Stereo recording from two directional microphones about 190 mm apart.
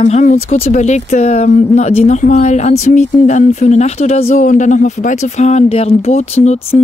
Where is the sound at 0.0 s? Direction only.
40° left (ahead or behind).